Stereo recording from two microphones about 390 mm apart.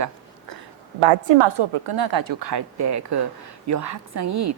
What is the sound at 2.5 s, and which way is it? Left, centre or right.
A woman's voice, right.